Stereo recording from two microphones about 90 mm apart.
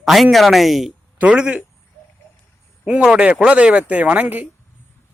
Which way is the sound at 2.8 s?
10° right (ahead or behind).